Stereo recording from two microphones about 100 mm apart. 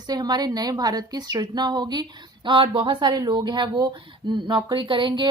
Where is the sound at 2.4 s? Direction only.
60° right (ahead or behind).